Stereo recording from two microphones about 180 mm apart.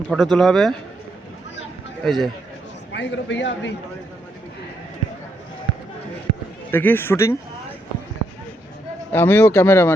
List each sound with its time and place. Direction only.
0.1 s a man's voice: centre (ahead or behind)
2.0 s a man's voice: centre (ahead or behind)
2.9 s a man's voice: 80° left
6.7 s speech: 10° left (ahead or behind)
9.1 s speech: 10° left (ahead or behind)